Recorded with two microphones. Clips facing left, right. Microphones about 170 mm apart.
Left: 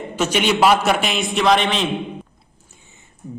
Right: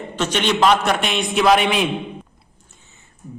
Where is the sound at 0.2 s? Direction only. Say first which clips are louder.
Left 1 dB; 10° left (ahead or behind); by 1.9 s 10° right (ahead or behind).